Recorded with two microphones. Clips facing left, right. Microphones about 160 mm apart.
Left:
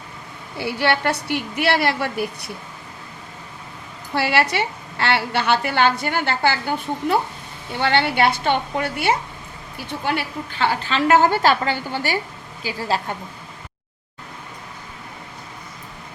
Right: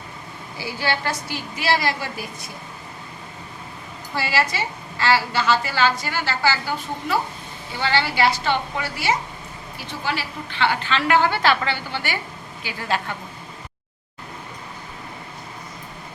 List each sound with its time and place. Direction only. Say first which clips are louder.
0.5 s a woman's voice: left 5 dB; 65° left (ahead or behind)
4.1 s a woman's voice: left 4 dB; 65° left (ahead or behind)
10.6 s a woman's voice: left 1 dB; 40° left (ahead or behind)